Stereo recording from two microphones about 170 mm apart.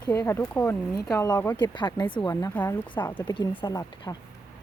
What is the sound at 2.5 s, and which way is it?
Speech, 10° left (ahead or behind).